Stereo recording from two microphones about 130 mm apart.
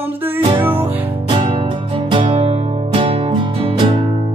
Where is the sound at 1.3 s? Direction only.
45° right (ahead or behind).